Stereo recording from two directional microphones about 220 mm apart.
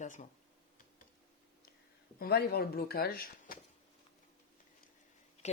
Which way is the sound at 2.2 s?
45° left (ahead or behind).